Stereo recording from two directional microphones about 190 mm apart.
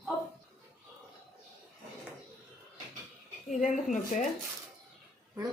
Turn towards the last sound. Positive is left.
turn(degrees=40)  # may be behind; listen again after turning